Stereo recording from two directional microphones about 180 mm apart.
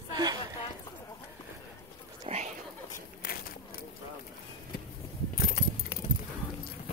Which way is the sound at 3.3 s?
55° left (ahead or behind).